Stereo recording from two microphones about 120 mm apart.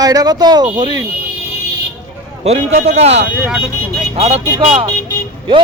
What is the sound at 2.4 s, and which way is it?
Speech, 65° right (ahead or behind).